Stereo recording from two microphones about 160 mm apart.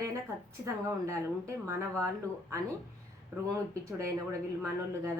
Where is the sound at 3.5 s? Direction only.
20° right (ahead or behind).